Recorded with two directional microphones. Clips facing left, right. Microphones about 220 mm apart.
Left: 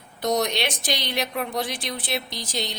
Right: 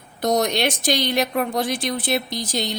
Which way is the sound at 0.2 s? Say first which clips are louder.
Right 4 dB; 50° right (ahead or behind).